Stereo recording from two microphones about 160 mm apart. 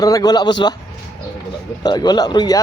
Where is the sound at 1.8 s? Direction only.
25° left (ahead or behind).